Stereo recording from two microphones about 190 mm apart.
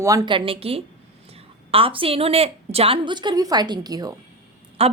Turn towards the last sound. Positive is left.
turn(degrees=-30)  # may be behind; listen again after turning